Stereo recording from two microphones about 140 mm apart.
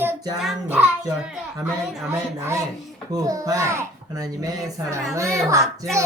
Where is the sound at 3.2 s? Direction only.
25° right (ahead or behind).